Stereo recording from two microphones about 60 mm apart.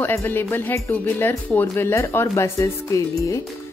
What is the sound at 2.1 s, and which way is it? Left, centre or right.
Speech, left.